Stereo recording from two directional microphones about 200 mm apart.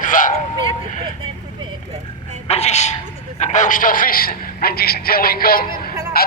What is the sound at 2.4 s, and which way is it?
A man's voice, 30° left (ahead or behind).